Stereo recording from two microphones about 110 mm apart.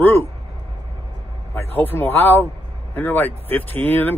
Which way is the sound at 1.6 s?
20° left (ahead or behind).